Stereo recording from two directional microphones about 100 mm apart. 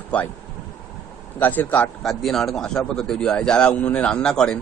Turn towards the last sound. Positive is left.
turn(degrees=5)  # may be behind; listen again after turning